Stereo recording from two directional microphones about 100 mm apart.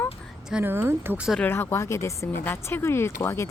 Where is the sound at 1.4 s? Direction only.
25° left (ahead or behind).